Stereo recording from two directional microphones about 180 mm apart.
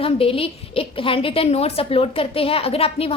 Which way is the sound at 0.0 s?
30° left (ahead or behind).